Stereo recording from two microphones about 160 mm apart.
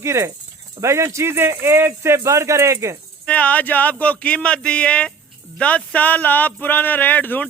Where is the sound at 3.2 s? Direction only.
10° left (ahead or behind).